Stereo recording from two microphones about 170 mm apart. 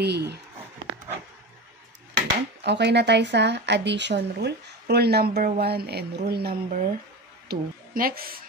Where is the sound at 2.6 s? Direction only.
85° right.